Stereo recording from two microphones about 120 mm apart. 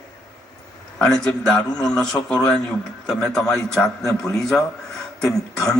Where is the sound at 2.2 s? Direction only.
15° left (ahead or behind).